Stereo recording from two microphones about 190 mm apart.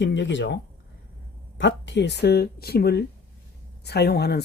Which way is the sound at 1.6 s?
70° left (ahead or behind).